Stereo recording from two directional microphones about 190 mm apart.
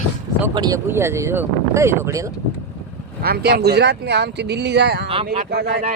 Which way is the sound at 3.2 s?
55° right (ahead or behind).